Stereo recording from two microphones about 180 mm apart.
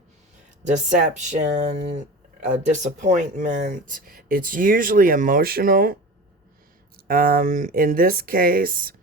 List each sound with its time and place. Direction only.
0.6 s speech: 45° right (ahead or behind)